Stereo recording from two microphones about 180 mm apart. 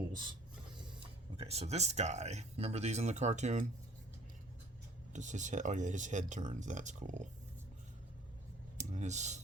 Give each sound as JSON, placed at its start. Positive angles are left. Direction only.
{"t": 0.1, "sound": "a sound", "side_deg": -25}
{"t": 1.4, "sound": "speech", "side_deg": -35}
{"t": 5.1, "sound": "speech", "side_deg": -40}
{"t": 8.9, "sound": "speech", "side_deg": -40}